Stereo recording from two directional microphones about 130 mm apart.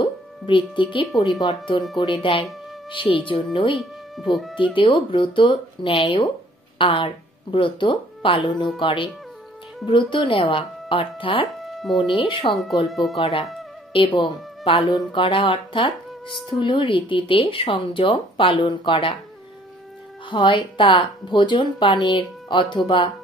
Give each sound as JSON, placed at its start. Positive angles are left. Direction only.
{"t": 0.0, "sound": "music", "side_deg": 40}
{"t": 1.4, "sound": "speech", "side_deg": 35}
{"t": 3.7, "sound": "speech", "side_deg": 0}
{"t": 4.6, "sound": "speech", "side_deg": 40}
{"t": 11.6, "sound": "music", "side_deg": 0}
{"t": 12.2, "sound": "speech", "side_deg": 40}
{"t": 12.8, "sound": "speech", "side_deg": 0}
{"t": 13.2, "sound": "speech", "side_deg": 45}
{"t": 20.2, "sound": "speech", "side_deg": 40}